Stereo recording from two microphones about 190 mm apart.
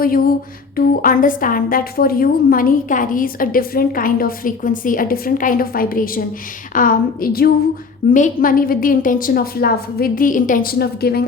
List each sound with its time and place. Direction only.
0.0 s a woman's voice: 50° left (ahead or behind)